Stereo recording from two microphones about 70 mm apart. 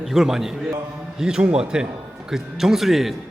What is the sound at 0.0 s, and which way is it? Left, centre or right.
A man's voice, centre.